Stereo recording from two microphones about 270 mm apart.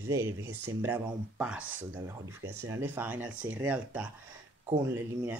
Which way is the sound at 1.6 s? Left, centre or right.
Right.